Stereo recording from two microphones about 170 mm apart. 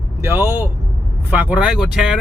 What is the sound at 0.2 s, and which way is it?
Speech, 15° right (ahead or behind).